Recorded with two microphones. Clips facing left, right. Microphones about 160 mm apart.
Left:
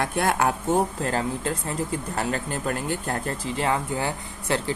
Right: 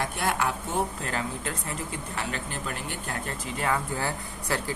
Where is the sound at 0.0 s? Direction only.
50° left (ahead or behind).